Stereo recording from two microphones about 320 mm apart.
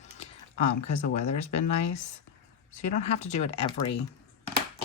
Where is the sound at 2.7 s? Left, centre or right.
Left.